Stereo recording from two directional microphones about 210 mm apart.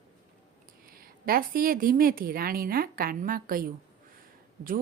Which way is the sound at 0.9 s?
45° right (ahead or behind).